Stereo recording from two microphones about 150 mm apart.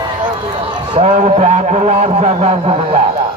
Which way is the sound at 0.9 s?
40° right (ahead or behind).